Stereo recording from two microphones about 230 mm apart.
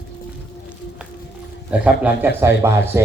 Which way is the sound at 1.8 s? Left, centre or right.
Centre.